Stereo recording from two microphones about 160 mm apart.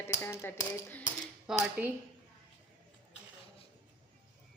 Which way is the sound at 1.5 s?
5° right (ahead or behind).